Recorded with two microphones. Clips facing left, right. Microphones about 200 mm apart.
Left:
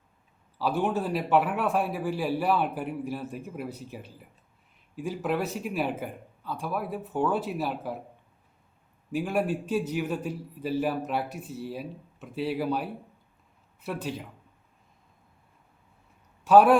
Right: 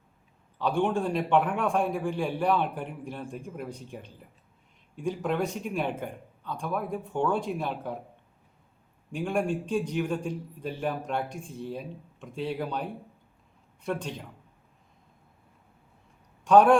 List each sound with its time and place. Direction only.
0.6 s a man's voice: 5° left (ahead or behind)
9.1 s a man's voice: 5° left (ahead or behind)
16.4 s a man's voice: 5° left (ahead or behind)